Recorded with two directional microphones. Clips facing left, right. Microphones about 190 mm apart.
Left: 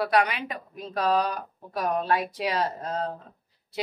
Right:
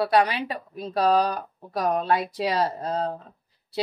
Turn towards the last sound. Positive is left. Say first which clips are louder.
# right 3 dB
turn(degrees=-35)  # may be behind; listen again after turning